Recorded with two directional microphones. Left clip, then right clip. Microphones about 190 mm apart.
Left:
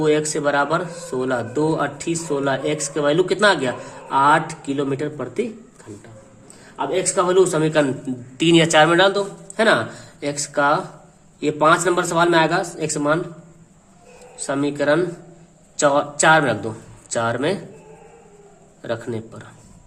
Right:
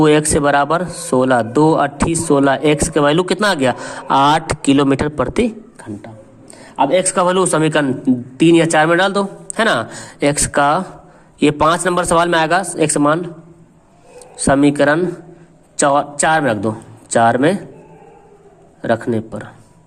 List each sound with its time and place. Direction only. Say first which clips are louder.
0.0 s speech: right 6 dB; 40° right (ahead or behind)
6.7 s a man's voice: right 7 dB; 45° right (ahead or behind)
7.9 s speech: right 8 dB; 25° right (ahead or behind)
14.3 s a man's voice: right 9 dB; 35° right (ahead or behind)
18.8 s a man's voice: right 9 dB; 25° right (ahead or behind)